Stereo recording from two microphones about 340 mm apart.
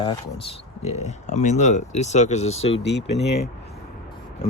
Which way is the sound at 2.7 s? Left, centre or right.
Left.